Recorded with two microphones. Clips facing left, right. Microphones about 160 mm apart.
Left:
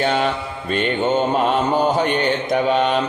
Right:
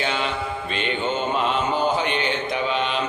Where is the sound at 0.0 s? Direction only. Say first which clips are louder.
Left 6 dB; 45° left (ahead or behind).